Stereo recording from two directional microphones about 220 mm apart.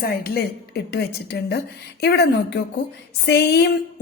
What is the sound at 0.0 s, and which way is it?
A woman's voice, 45° left (ahead or behind).